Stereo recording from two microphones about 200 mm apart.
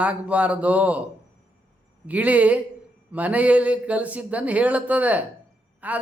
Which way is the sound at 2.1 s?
5° right (ahead or behind).